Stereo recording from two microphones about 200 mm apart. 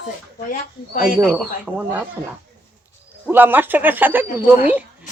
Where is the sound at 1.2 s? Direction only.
5° right (ahead or behind).